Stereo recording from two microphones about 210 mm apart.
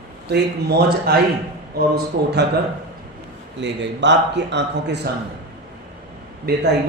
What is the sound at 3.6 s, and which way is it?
Speech, 60° right (ahead or behind).